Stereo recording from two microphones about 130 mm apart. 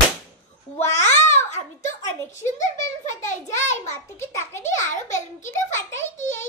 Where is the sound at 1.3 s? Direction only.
65° left (ahead or behind).